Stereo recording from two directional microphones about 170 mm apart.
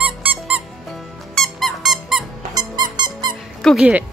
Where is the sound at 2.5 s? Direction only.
25° right (ahead or behind).